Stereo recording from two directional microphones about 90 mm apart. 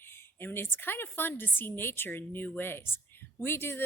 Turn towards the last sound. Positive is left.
turn(degrees=25)  # may be behind; listen again after turning